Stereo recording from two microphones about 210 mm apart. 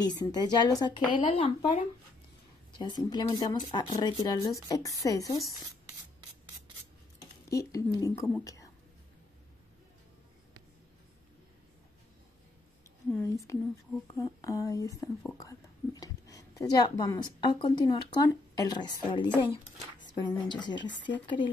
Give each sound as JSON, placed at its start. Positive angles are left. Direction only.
{"t": 0.0, "sound": "a woman's voice", "side_deg": 20}
{"t": 7.5, "sound": "a woman's voice", "side_deg": 15}
{"t": 13.1, "sound": "a woman's voice", "side_deg": 10}
{"t": 20.4, "sound": "a woman's voice", "side_deg": 20}